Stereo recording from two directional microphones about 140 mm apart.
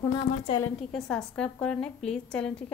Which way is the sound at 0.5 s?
40° left (ahead or behind).